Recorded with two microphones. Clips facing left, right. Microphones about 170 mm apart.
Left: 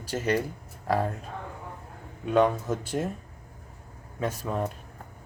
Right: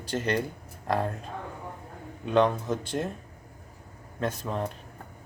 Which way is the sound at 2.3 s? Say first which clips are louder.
Left 1 dB; 5° left (ahead or behind).